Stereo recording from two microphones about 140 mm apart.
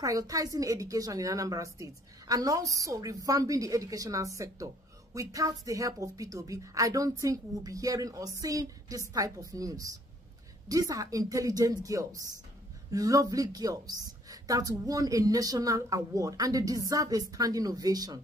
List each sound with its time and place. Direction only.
0.0 s a woman's voice: 25° right (ahead or behind)